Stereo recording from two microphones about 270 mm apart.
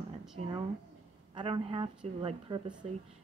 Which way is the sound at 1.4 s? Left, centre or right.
Centre.